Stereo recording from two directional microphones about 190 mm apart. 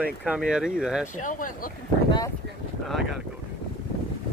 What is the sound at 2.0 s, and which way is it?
Speech, 20° left (ahead or behind).